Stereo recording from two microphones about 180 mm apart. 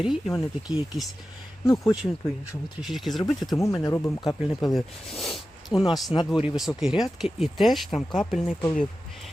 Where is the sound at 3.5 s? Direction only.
15° left (ahead or behind).